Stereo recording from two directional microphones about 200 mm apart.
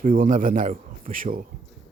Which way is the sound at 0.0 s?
45° right (ahead or behind).